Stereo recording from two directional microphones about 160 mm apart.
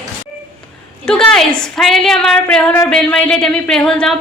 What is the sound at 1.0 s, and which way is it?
Speech, 5° left (ahead or behind).